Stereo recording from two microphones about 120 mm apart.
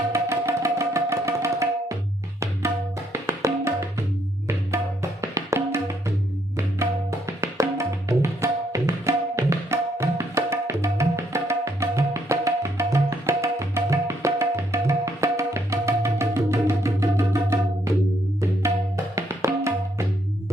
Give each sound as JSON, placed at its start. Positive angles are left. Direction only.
{"t": 0.1, "sound": "music", "side_deg": -25}
{"t": 5.2, "sound": "music", "side_deg": -25}
{"t": 7.6, "sound": "tabla", "side_deg": -25}
{"t": 19.1, "sound": "music", "side_deg": -25}